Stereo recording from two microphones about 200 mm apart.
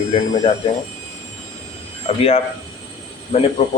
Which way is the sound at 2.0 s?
30° left (ahead or behind).